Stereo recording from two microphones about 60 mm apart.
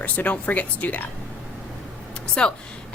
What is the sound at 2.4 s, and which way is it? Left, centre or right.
Speech, centre.